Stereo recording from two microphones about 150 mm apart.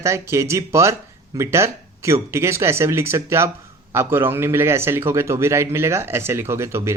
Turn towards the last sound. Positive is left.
turn(degrees=-20)  # may be behind; listen again after turning